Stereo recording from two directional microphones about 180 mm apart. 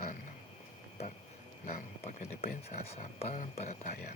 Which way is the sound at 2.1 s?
40° left (ahead or behind).